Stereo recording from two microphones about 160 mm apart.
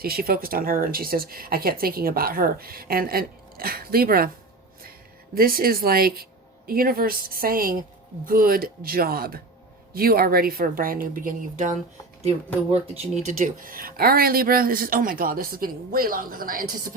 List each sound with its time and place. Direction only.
0.0 s speech: 70° right (ahead or behind)
12.7 s speech: 40° right (ahead or behind)
13.2 s speech: 55° right (ahead or behind)